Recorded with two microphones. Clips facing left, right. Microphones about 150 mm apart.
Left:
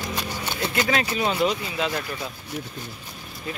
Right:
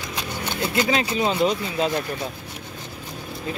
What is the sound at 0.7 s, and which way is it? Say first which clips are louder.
Speech: right 2 dB; 20° right (ahead or behind).